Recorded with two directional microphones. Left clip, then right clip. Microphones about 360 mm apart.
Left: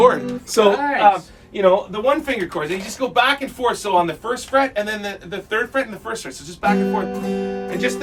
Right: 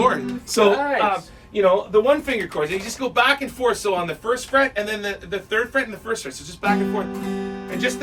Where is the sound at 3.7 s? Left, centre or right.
Centre.